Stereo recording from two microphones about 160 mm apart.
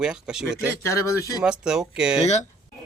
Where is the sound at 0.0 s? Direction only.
5° right (ahead or behind).